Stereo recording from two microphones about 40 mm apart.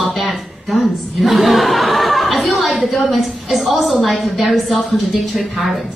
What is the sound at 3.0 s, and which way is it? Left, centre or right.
A woman's voice, centre.